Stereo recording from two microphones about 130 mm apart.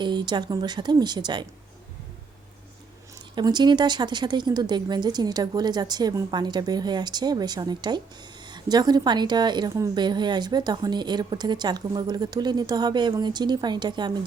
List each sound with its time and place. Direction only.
0.0 s a woman's voice: 35° right (ahead or behind)
3.3 s a woman's voice: 35° right (ahead or behind)